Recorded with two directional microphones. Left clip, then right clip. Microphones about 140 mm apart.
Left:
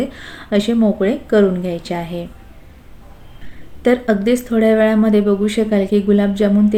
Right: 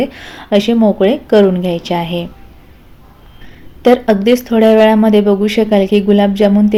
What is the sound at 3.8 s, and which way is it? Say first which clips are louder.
Speech: right 5 dB; 5° right (ahead or behind).